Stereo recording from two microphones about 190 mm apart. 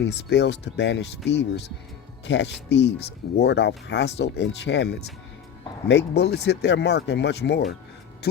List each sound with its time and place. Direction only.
0.0 s speech: 65° left (ahead or behind)